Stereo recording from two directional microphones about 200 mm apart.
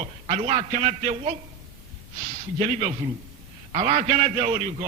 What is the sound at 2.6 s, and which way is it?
A man's voice, 30° right (ahead or behind).